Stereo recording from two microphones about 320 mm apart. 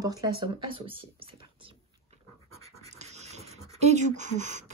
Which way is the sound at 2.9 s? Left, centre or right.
Right.